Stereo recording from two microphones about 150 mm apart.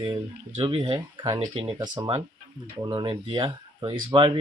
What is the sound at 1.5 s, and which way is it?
Speech, 35° right (ahead or behind).